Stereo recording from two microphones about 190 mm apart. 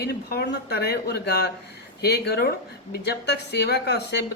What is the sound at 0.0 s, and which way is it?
A man's voice, 60° left (ahead or behind).